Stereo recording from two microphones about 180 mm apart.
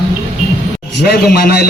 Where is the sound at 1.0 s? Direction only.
60° left (ahead or behind).